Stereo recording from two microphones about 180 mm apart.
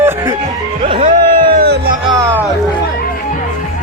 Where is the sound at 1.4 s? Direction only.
60° right (ahead or behind).